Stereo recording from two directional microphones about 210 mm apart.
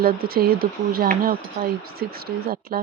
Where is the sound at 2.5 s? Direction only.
45° right (ahead or behind).